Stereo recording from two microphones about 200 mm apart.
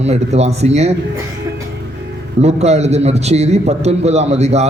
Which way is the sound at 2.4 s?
35° right (ahead or behind).